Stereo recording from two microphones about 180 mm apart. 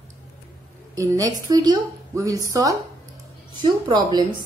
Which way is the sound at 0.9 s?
20° right (ahead or behind).